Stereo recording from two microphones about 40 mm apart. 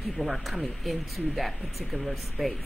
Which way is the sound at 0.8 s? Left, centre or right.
Centre.